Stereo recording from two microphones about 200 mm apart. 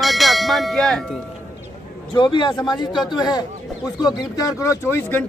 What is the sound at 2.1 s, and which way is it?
Speech, 25° left (ahead or behind).